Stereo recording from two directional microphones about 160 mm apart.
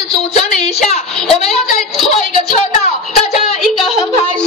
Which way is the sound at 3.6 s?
Centre (ahead or behind).